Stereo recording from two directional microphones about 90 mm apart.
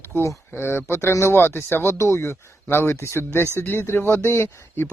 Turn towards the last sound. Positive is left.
turn(degrees=25)  # may be behind; listen again after turning